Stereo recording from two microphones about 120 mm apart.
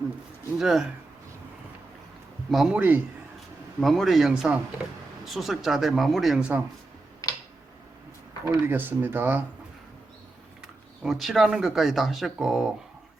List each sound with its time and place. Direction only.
0.6 s speech: 5° right (ahead or behind)
2.5 s speech: centre (ahead or behind)
2.7 s speech: 15° right (ahead or behind)
3.8 s speech: centre (ahead or behind)
8.4 s speech: 15° right (ahead or behind)
10.6 s speech: 5° right (ahead or behind)